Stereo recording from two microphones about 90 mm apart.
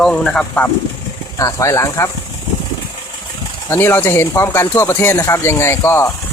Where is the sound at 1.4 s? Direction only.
40° left (ahead or behind).